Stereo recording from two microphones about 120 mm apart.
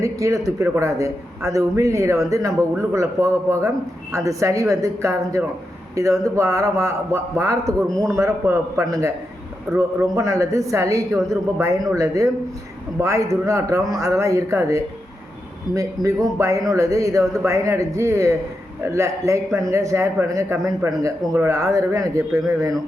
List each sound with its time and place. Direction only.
0.0 s a man's voice: 25° right (ahead or behind)